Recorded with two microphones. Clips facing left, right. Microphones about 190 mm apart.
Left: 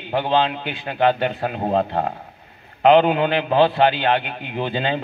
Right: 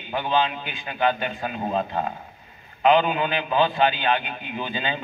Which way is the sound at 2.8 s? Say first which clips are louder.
Left 5 dB; 65° left (ahead or behind).